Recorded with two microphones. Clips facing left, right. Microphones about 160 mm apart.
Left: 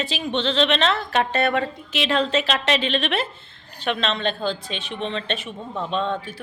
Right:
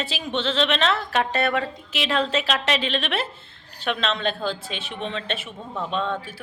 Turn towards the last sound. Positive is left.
turn(degrees=0)  # may be behind; listen again after turning